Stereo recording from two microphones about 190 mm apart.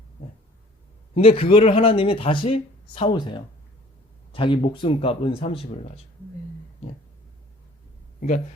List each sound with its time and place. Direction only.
1.1 s speech: 30° left (ahead or behind)